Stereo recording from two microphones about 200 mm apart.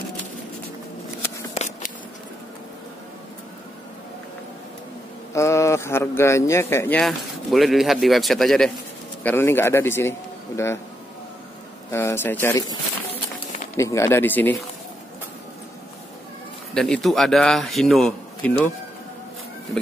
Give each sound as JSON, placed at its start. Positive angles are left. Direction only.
{"t": 1.5, "sound": "shuffling cards", "side_deg": 35}
{"t": 5.3, "sound": "a man's voice", "side_deg": 15}
{"t": 7.0, "sound": "speech", "side_deg": 0}
{"t": 11.9, "sound": "a man's voice", "side_deg": 10}
{"t": 13.1, "sound": "a sound", "side_deg": 40}
{"t": 13.7, "sound": "a man's voice", "side_deg": 15}
{"t": 16.7, "sound": "speech", "side_deg": 0}